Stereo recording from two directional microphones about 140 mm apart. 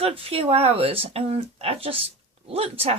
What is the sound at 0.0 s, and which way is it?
Speech, 45° right (ahead or behind).